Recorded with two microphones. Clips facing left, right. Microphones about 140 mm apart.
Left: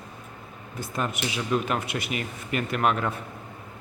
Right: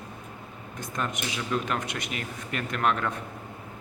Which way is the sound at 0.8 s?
5° left (ahead or behind).